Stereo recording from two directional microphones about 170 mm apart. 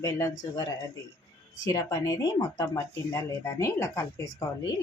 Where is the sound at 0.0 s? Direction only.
20° left (ahead or behind).